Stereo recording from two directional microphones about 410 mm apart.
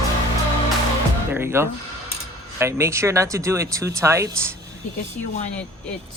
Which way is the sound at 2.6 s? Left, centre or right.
Centre.